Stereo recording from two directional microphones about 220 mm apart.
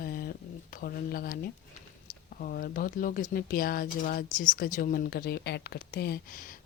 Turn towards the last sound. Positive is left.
turn(degrees=45)  # may be behind; listen again after turning